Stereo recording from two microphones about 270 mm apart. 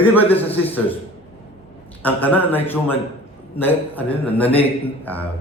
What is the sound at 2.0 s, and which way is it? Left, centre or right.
A man's voice, centre.